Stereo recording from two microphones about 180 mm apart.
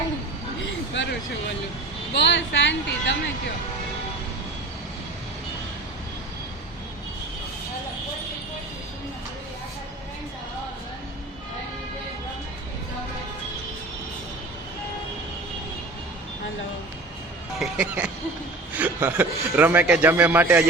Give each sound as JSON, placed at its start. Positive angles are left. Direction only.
{"t": 0.9, "sound": "a sound", "side_deg": 90}
{"t": 2.1, "sound": "a woman's voice", "side_deg": 75}
{"t": 17.6, "sound": "music", "side_deg": -5}
{"t": 18.7, "sound": "a man's voice", "side_deg": -10}